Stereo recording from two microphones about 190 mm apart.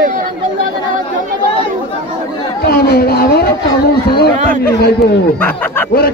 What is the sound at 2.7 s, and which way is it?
Speech, 55° left (ahead or behind).